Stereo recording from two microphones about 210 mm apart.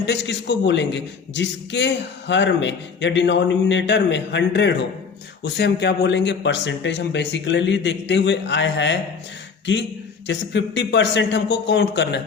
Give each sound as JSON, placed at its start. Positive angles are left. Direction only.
{"t": 0.0, "sound": "a man's voice", "side_deg": 55}
{"t": 10.2, "sound": "a man's voice", "side_deg": 60}